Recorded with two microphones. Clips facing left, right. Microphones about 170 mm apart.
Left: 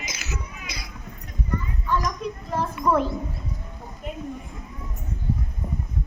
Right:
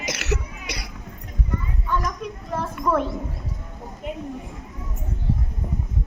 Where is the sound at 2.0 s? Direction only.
Centre (ahead or behind).